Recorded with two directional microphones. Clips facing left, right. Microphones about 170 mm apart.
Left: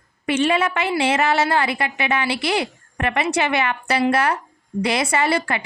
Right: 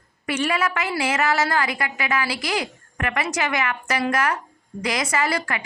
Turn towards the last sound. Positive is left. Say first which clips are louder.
# left 4 dB
turn(degrees=30)  # may be behind; listen again after turning